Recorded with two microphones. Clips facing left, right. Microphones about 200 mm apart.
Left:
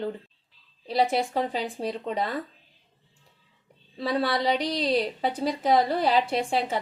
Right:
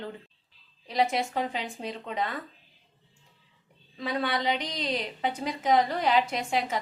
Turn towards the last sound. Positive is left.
turn(degrees=30)  # may be behind; listen again after turning